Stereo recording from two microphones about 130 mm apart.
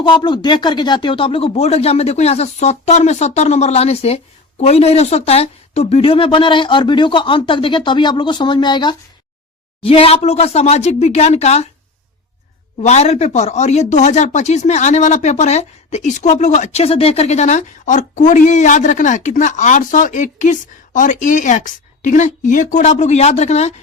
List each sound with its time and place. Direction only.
0.0 s speech: 35° left (ahead or behind)
9.8 s speech: 45° left (ahead or behind)
12.8 s speech: 60° left (ahead or behind)